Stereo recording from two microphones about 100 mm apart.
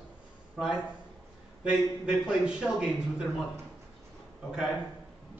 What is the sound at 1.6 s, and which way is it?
A man's voice, 10° right (ahead or behind).